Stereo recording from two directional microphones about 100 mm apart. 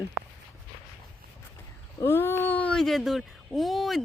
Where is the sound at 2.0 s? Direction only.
20° left (ahead or behind).